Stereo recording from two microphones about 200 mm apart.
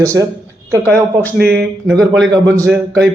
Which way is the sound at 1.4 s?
Centre (ahead or behind).